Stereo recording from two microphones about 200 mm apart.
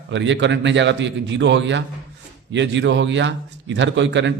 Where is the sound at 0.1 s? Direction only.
65° right (ahead or behind).